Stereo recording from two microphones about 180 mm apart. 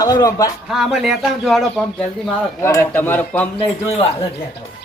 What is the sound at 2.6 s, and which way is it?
Speech, 15° left (ahead or behind).